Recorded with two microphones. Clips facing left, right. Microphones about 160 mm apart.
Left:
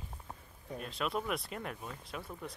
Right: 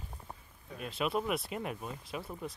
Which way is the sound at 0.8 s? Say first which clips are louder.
Right 3 dB; 5° right (ahead or behind).